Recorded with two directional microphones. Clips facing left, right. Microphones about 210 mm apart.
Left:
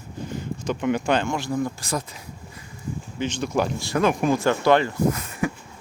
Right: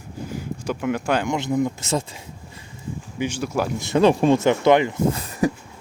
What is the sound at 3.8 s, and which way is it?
Speech, 25° right (ahead or behind).